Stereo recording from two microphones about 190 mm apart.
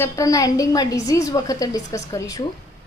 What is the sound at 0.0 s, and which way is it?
A woman's voice, 15° left (ahead or behind).